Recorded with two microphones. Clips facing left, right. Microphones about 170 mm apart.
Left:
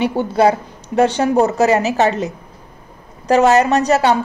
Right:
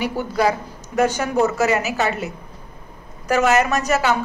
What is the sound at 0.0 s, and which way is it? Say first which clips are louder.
A woman's voice: left 6 dB; 25° left (ahead or behind).